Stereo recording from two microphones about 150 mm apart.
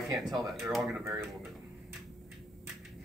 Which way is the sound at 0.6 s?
Centre (ahead or behind).